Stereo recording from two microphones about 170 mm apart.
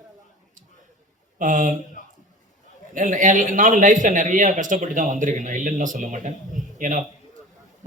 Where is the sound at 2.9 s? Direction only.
50° right (ahead or behind).